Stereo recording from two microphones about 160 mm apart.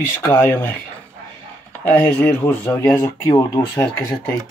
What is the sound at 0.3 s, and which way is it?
Speech, 10° left (ahead or behind).